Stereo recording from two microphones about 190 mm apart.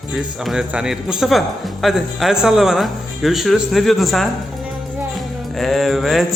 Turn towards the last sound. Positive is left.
turn(degrees=0)  # may be behind; listen again after turning